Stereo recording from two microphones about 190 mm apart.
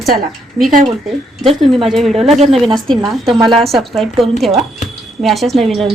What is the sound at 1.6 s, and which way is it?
Speech, centre (ahead or behind).